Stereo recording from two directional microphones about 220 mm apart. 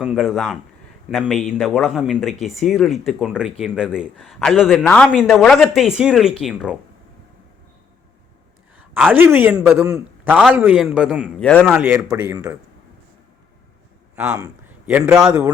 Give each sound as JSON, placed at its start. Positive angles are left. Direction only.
{"t": 0.0, "sound": "speech", "side_deg": 0}
{"t": 9.0, "sound": "a man's voice", "side_deg": -10}
{"t": 14.3, "sound": "a man's voice", "side_deg": -10}